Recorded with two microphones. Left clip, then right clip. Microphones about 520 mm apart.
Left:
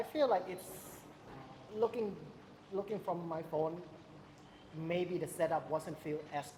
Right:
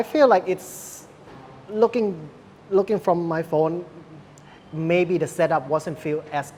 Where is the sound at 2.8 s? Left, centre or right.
Right.